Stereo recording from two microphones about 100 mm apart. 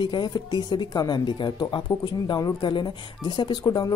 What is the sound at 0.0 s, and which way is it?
Speech, 45° left (ahead or behind).